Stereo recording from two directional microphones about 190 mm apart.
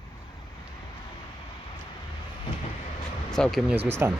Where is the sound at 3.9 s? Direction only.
15° right (ahead or behind).